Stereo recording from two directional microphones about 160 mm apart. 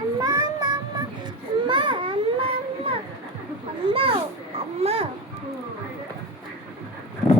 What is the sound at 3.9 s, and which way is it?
Children playing, 35° right (ahead or behind).